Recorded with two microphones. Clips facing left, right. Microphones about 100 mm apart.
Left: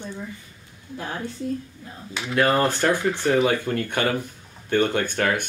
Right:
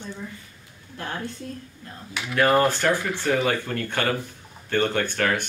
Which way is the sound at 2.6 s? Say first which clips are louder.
Left 1 dB; 15° left (ahead or behind).